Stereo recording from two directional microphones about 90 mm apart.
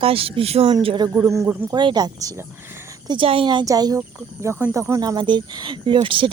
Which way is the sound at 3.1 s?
80° right.